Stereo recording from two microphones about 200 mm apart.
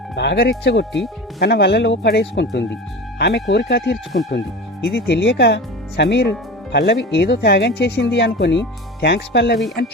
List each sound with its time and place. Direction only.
0.2 s speech: 55° left (ahead or behind)